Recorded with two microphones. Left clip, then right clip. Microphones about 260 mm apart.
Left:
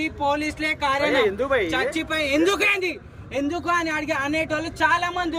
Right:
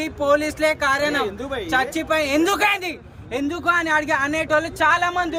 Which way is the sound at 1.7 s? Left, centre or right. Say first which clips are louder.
Right 4 dB; centre.